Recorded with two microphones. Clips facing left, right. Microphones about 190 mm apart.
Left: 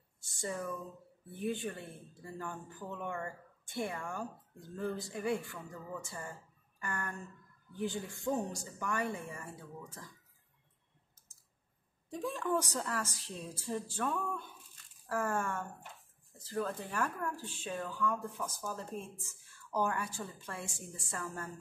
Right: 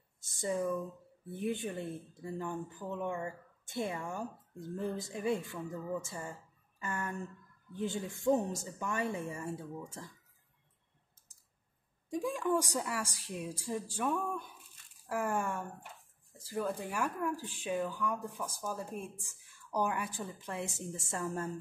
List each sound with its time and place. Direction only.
0.3 s speech: 20° right (ahead or behind)
12.1 s speech: 10° right (ahead or behind)